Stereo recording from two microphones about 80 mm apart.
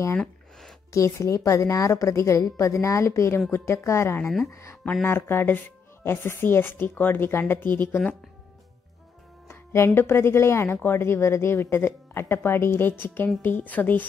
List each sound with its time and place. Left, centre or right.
0.2 s a sound: centre
0.9 s speech: left
5.0 s speech: left
9.5 s speech: left